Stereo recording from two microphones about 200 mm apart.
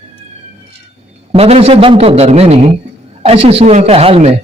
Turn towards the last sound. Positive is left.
turn(degrees=-30)  # may be behind; listen again after turning